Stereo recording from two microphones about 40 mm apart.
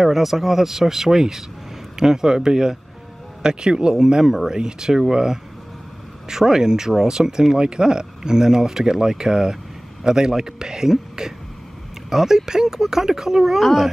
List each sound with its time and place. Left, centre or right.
0.0 s speech: centre
13.6 s speech: centre